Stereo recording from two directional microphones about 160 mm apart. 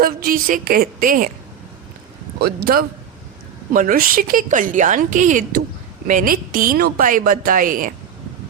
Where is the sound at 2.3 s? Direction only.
85° right.